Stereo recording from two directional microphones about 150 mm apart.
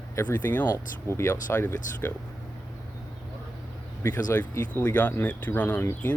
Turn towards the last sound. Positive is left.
turn(degrees=10)  # may be behind; listen again after turning